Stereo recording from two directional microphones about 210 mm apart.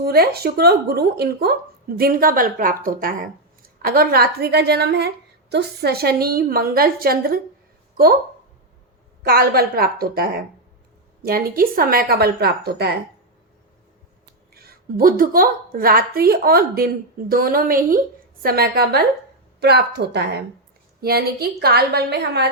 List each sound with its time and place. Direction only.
0.0 s speech: 45° right (ahead or behind)
9.2 s speech: 45° right (ahead or behind)
14.5 s speech: 45° right (ahead or behind)